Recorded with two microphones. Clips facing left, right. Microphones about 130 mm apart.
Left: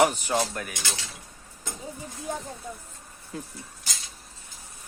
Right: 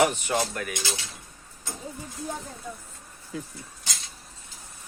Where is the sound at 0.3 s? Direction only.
10° left (ahead or behind).